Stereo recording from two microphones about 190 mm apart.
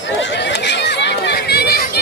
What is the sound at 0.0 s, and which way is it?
Chatter, 70° left (ahead or behind).